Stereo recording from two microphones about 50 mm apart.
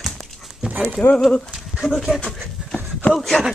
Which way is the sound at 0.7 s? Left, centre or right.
Right.